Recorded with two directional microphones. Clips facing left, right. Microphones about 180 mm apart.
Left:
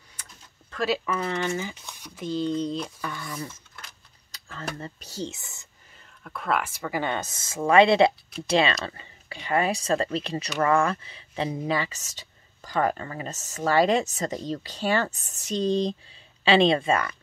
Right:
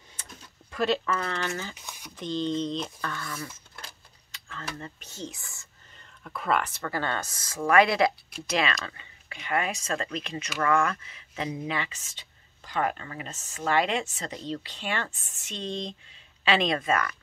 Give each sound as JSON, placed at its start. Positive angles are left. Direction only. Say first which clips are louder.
{"t": 0.2, "sound": "a sound", "louder": "right 2 dB", "side_deg": -25}
{"t": 0.7, "sound": "speech", "louder": "even", "side_deg": 5}
{"t": 4.3, "sound": "speech", "louder": "left 4 dB", "side_deg": 40}
{"t": 5.3, "sound": "speech", "louder": "left 2 dB", "side_deg": 20}
{"t": 5.9, "sound": "speech", "louder": "even", "side_deg": 0}